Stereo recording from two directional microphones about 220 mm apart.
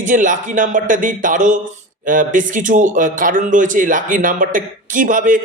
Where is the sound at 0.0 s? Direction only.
35° right (ahead or behind).